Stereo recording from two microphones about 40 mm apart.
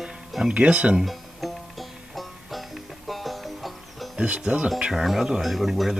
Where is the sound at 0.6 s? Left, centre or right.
Right.